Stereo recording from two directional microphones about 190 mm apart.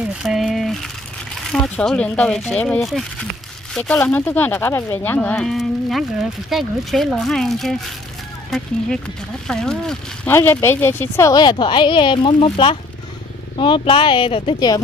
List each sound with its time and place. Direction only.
0.0 s speech: centre (ahead or behind); by 14.8 s 25° left (ahead or behind)